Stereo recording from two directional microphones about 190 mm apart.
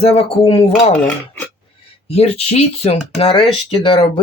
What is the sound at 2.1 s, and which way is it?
Speech, 30° left (ahead or behind).